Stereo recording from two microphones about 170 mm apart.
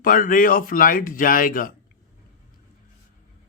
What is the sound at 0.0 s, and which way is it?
Speech, 55° left (ahead or behind).